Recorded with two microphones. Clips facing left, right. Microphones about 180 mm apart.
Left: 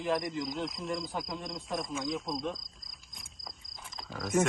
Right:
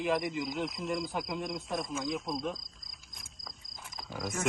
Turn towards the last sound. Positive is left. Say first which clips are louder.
# right 1 dB
turn(degrees=-5)  # may be behind; listen again after turning